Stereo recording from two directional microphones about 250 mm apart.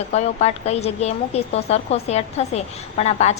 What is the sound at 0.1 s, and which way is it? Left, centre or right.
A woman's voice, left.